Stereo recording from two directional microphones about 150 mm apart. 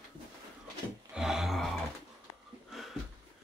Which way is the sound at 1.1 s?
5° right (ahead or behind).